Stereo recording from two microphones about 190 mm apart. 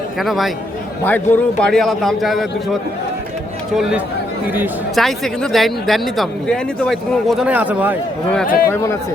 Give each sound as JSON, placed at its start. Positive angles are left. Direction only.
{"t": 0.2, "sound": "speech", "side_deg": 0}
{"t": 4.4, "sound": "speech", "side_deg": -10}
{"t": 4.9, "sound": "speech", "side_deg": 0}
{"t": 8.4, "sound": "speech", "side_deg": 50}
{"t": 8.7, "sound": "speech", "side_deg": 15}